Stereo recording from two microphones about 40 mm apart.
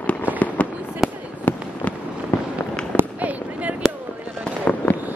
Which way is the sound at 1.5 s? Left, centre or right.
Left.